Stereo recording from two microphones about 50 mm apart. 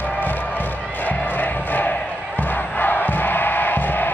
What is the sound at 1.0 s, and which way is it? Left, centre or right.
Crowd, left.